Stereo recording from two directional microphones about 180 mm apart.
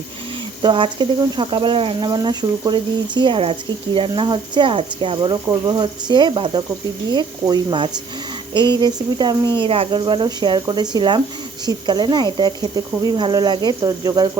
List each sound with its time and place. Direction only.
0.6 s speech: 25° right (ahead or behind)